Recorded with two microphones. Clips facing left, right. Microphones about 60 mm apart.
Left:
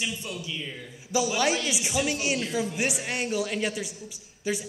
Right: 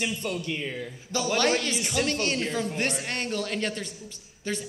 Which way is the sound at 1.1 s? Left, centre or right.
Centre.